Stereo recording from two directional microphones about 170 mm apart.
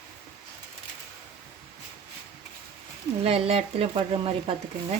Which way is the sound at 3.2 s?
35° right (ahead or behind).